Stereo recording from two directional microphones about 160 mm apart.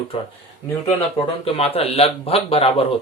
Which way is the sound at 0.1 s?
40° left (ahead or behind).